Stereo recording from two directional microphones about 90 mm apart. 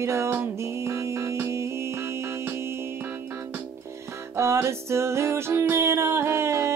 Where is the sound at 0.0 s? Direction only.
30° right (ahead or behind).